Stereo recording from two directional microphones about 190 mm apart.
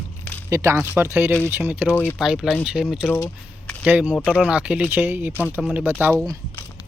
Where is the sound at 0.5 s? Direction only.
15° right (ahead or behind).